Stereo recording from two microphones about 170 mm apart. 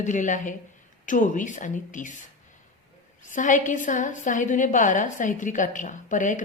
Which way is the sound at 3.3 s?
50° left (ahead or behind).